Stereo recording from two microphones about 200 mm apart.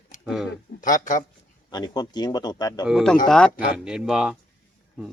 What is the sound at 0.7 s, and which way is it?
Speech, 40° left (ahead or behind).